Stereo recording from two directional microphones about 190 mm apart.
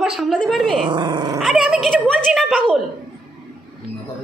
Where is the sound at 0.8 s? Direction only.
25° right (ahead or behind).